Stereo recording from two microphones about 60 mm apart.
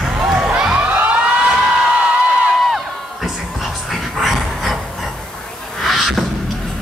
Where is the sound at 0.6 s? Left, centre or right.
Centre.